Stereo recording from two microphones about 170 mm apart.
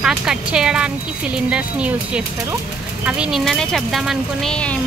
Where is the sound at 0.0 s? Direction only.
5° right (ahead or behind).